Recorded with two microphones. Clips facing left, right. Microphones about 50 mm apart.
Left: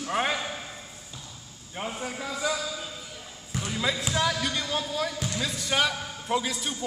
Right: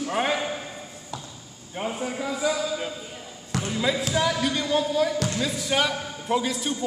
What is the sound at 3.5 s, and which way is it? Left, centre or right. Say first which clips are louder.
Basketball bounce: right 5 dB; right.